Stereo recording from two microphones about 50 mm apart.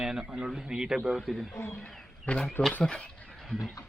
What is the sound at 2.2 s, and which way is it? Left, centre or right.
Speech, centre.